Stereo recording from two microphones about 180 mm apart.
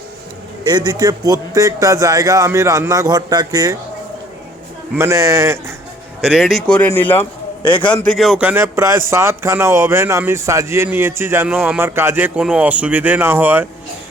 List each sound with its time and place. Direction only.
0.7 s a man's voice: 25° right (ahead or behind)
4.9 s speech: 15° right (ahead or behind)
6.2 s speech: centre (ahead or behind)